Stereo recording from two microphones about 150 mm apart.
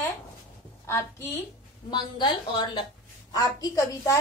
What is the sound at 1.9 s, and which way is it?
A woman's voice, 30° left (ahead or behind).